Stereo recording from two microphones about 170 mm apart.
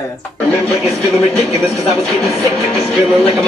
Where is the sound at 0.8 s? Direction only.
Centre (ahead or behind).